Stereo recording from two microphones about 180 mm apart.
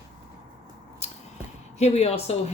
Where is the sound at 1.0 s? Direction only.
35° left (ahead or behind).